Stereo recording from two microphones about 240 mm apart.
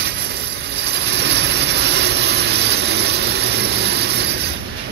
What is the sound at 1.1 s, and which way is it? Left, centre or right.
Vehicle, right.